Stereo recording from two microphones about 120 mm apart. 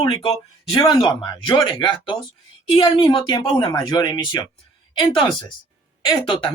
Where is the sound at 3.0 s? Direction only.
30° left (ahead or behind).